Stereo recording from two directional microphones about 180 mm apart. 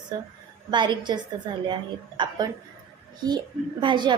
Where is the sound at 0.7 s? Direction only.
25° right (ahead or behind).